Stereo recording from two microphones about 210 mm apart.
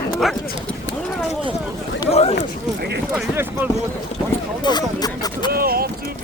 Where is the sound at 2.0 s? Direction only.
30° left (ahead or behind).